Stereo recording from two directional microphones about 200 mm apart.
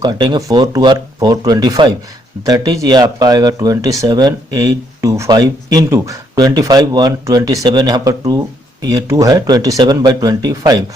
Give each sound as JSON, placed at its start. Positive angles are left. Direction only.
{"t": 0.0, "sound": "speech", "side_deg": -20}